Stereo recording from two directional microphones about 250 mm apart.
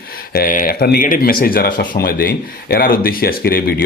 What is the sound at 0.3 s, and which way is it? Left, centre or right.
Speech, left.